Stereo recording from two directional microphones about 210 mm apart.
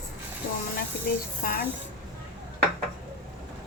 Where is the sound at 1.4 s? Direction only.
45° left (ahead or behind).